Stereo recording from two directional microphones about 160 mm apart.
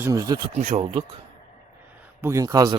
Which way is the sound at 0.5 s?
40° right (ahead or behind).